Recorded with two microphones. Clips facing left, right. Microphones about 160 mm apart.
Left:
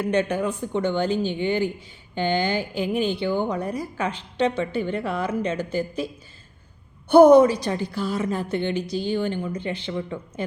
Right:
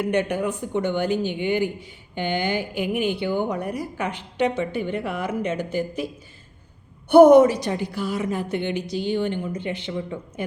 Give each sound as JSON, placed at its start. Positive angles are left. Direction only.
{"t": 0.0, "sound": "speech", "side_deg": -15}
{"t": 7.1, "sound": "speech", "side_deg": -20}